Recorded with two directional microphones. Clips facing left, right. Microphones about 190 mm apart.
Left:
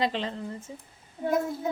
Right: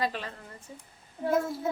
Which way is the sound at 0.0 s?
25° left (ahead or behind).